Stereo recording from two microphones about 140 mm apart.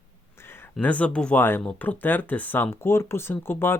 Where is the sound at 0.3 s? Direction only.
15° left (ahead or behind).